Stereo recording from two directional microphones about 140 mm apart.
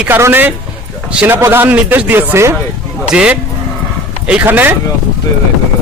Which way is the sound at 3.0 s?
5° right (ahead or behind).